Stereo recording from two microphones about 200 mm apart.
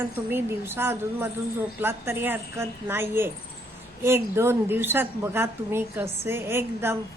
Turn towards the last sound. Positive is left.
turn(degrees=-10)  # may be behind; listen again after turning